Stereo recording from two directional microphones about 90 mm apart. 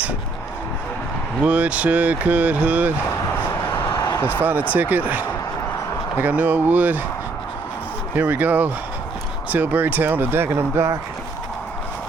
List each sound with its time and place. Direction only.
1.5 s speech: 15° right (ahead or behind)
4.1 s a sound: 25° left (ahead or behind)
4.4 s speech: 20° right (ahead or behind)
8.1 s speech: 20° right (ahead or behind)